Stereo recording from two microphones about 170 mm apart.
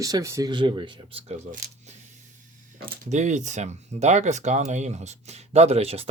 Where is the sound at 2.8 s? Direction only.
55° right (ahead or behind).